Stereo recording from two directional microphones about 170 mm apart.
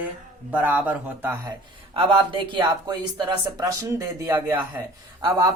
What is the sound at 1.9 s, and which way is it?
Speech, 30° right (ahead or behind).